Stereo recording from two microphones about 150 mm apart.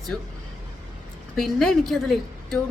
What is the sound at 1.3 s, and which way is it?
A woman's voice, centre (ahead or behind).